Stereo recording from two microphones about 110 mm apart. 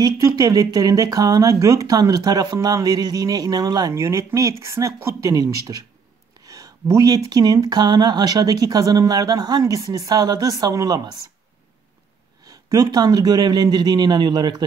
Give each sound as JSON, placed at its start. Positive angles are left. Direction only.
{"t": 0.0, "sound": "speech", "side_deg": -35}
{"t": 12.4, "sound": "speech", "side_deg": -35}